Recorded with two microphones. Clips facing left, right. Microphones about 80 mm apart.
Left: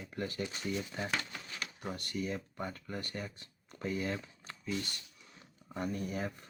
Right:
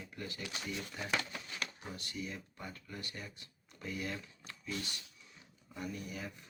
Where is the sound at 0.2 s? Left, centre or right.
Left.